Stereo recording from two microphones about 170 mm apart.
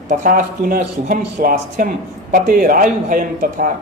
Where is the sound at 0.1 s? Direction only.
50° right (ahead or behind).